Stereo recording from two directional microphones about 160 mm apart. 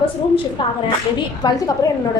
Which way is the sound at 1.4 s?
25° left (ahead or behind).